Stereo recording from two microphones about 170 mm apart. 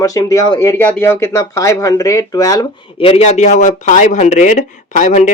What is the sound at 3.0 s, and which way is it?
Speech, 35° left (ahead or behind).